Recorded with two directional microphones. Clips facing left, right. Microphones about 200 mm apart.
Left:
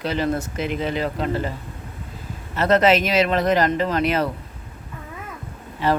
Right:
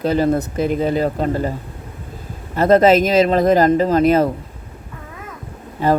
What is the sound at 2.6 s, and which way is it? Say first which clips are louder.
Speech: right 5 dB; 45° right (ahead or behind).